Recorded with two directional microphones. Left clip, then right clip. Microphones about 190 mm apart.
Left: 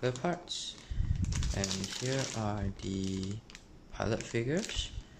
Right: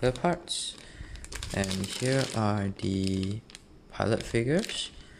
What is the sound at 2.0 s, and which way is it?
Speech, 40° right (ahead or behind).